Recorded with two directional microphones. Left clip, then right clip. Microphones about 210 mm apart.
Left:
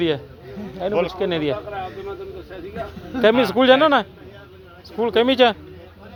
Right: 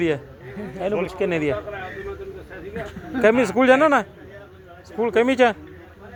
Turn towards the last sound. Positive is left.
turn(degrees=-5)  # may be behind; listen again after turning